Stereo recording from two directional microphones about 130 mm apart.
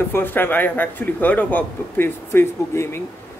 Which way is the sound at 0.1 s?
15° left (ahead or behind).